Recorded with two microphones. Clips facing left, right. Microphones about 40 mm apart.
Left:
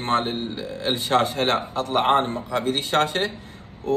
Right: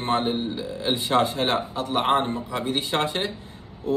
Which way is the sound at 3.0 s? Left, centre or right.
Left.